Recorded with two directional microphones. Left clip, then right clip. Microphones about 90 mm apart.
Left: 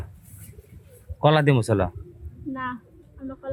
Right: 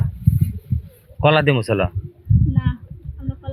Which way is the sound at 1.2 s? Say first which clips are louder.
Right 4 dB; 15° left (ahead or behind).